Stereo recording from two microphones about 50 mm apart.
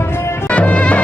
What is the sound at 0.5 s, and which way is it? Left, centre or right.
Music, left.